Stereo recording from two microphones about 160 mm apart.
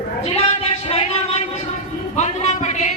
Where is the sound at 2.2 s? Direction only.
45° left (ahead or behind).